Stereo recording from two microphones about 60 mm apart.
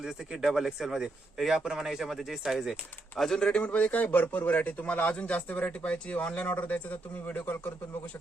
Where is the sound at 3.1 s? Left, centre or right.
Centre.